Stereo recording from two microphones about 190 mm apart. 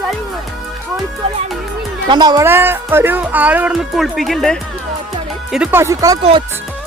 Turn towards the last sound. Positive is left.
turn(degrees=-15)  # may be behind; listen again after turning